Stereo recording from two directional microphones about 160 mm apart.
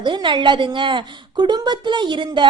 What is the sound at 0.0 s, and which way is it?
A woman's voice, 30° right (ahead or behind).